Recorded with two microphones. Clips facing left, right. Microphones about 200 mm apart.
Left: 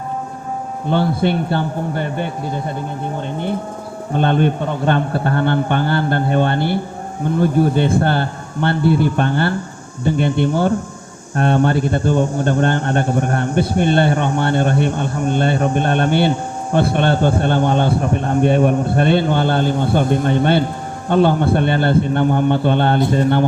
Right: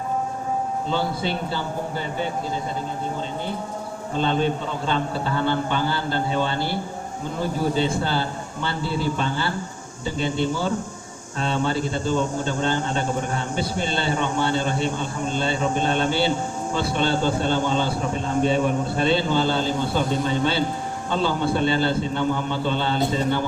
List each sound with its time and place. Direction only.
0.9 s a man's voice: 60° left (ahead or behind)
4.1 s a man's voice: 60° left (ahead or behind)